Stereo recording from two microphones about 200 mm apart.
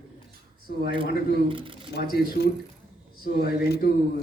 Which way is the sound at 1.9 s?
55° left (ahead or behind).